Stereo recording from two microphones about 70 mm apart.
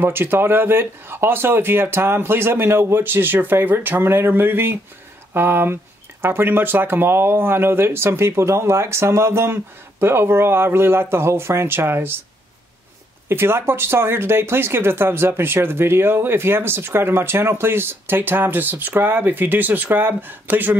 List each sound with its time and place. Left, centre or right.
0.0 s speech: right
13.3 s speech: right